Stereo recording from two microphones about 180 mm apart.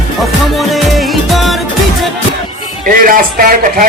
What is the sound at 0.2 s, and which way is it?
Music, centre (ahead or behind).